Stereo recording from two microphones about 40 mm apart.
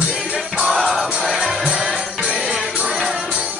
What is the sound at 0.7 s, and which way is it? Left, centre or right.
Music, centre.